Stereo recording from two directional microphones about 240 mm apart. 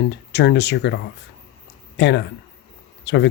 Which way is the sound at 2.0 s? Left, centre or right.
Left.